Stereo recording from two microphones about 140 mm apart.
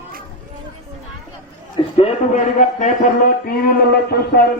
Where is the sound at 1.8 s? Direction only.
40° left (ahead or behind).